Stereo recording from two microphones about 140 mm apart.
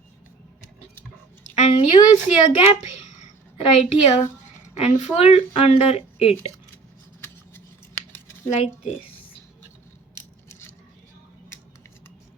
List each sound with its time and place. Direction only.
1.5 s a woman's voice: 50° left (ahead or behind)
3.2 s a sound: 50° left (ahead or behind)
4.8 s speech: 50° left (ahead or behind)